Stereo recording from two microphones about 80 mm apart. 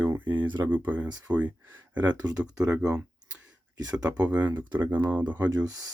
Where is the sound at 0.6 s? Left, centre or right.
Right.